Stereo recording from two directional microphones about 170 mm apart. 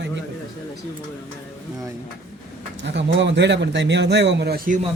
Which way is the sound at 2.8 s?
90° right.